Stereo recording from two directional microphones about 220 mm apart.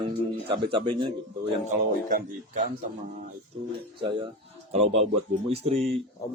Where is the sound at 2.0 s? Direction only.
35° right (ahead or behind).